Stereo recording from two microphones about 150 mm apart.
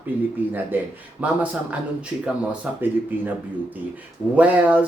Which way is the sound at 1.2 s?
10° right (ahead or behind).